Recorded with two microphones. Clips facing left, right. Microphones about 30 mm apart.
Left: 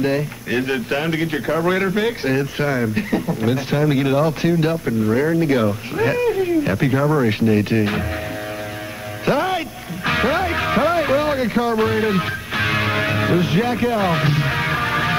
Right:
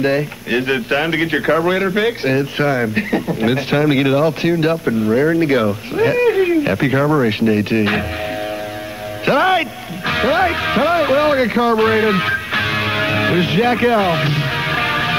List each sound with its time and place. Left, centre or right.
0.0 s speech: right
1.6 s speech: centre
3.3 s speech: right
5.0 s speech: centre
5.3 s speech: right
5.7 s speech: centre
6.1 s a sound: right
6.7 s speech: right
9.2 s speech: right
10.0 s music: centre
10.5 s speech: right
12.6 s music: centre; by 14.0 s right
14.0 s music: centre